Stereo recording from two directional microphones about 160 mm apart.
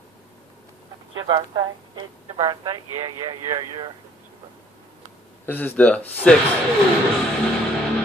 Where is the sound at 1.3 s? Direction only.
30° right (ahead or behind).